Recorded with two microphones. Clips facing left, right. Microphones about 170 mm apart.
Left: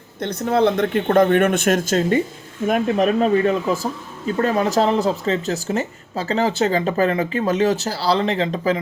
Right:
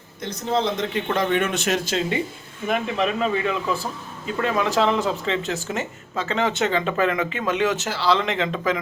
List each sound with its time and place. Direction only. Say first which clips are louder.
0.2 s speech: left 6 dB; 60° left (ahead or behind); by 8.8 s 35° left (ahead or behind)